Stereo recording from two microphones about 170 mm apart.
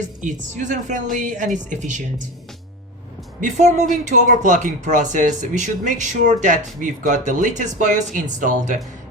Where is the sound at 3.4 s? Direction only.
45° right (ahead or behind).